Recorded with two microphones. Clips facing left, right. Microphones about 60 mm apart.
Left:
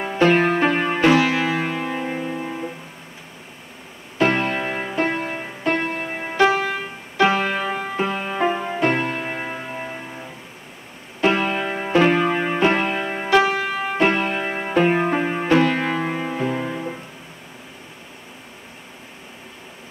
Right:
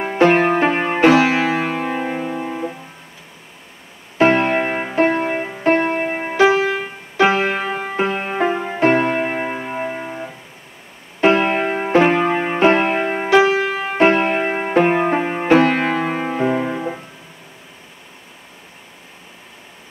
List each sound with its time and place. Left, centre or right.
0.0 s music: right
2.0 s music: centre
4.2 s music: right
6.2 s music: centre
7.9 s music: right
8.4 s music: centre
8.8 s music: right
9.4 s music: centre
11.1 s piano: right
12.5 s music: right
13.3 s music: centre
13.9 s music: right; by 15.4 s centre
15.4 s music: right; by 17.0 s centre